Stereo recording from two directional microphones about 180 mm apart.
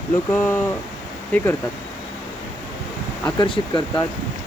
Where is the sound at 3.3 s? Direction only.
25° left (ahead or behind).